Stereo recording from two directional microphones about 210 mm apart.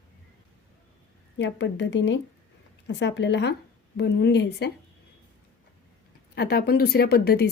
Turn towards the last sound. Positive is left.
turn(degrees=50)  # may be behind; listen again after turning